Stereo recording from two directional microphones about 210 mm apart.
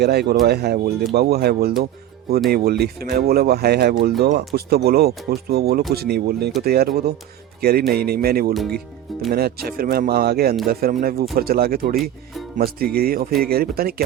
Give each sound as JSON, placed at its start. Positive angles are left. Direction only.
{"t": 0.0, "sound": "speech", "side_deg": -50}